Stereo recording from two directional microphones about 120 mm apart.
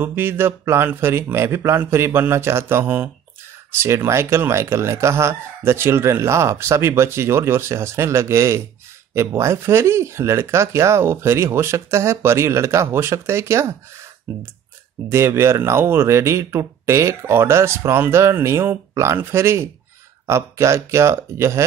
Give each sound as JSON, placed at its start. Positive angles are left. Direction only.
{"t": 0.0, "sound": "speech", "side_deg": -20}
{"t": 15.0, "sound": "speech", "side_deg": -20}